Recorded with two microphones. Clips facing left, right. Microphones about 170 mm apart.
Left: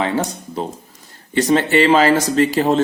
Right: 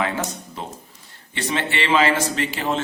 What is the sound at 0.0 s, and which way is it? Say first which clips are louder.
Music: left 5 dB; 35° left (ahead or behind).